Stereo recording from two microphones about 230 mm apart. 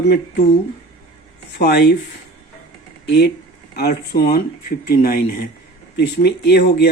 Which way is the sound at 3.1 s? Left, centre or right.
Left.